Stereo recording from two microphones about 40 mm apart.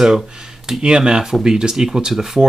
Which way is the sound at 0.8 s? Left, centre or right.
Right.